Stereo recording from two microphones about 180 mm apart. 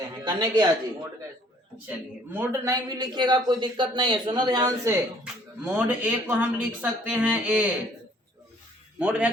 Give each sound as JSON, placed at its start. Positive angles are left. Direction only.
{"t": 0.3, "sound": "speech", "side_deg": -20}
{"t": 2.3, "sound": "a man's voice", "side_deg": -15}
{"t": 9.0, "sound": "a man's voice", "side_deg": -5}